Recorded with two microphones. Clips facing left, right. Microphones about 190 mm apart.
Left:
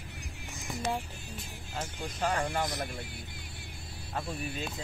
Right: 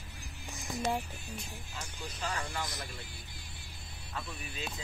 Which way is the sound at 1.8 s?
55° left (ahead or behind).